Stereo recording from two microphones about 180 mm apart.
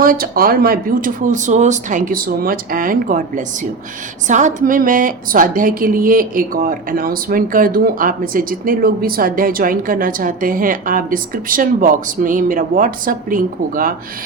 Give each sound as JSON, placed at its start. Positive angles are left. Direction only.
{"t": 0.0, "sound": "a woman's voice", "side_deg": -55}